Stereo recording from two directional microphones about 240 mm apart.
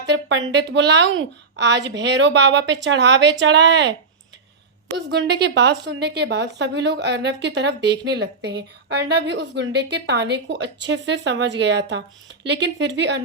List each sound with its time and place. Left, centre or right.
0.0 s speech: right
4.9 s speech: right